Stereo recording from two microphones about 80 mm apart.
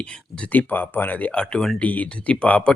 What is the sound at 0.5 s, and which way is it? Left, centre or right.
Speech, left.